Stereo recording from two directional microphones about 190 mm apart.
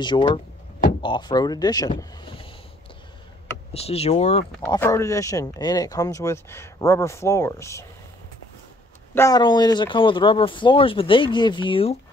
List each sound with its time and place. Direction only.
0.0 s speech: 25° left (ahead or behind)
3.7 s speech: 30° left (ahead or behind)
4.6 s speech: 10° left (ahead or behind)
9.1 s speech: 15° left (ahead or behind)